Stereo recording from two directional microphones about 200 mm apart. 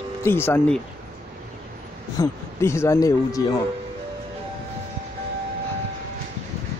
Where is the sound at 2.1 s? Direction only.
15° left (ahead or behind).